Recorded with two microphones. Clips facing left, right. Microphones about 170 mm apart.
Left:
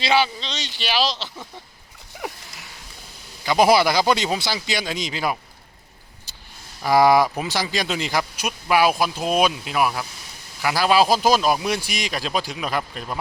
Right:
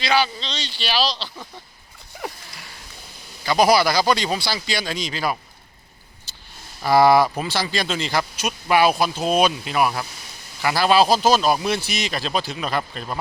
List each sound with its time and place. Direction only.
0.0 s speech: 20° left (ahead or behind)
3.4 s speech: 20° left (ahead or behind)
6.8 s speech: 10° left (ahead or behind)